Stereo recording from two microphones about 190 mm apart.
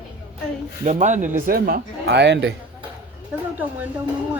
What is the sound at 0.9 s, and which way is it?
A man's voice, 40° right (ahead or behind).